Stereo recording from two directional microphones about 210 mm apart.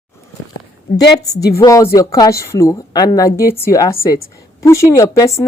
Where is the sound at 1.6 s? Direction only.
15° left (ahead or behind).